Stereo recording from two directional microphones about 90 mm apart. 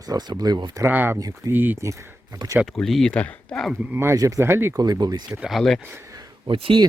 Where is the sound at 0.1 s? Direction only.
50° right (ahead or behind).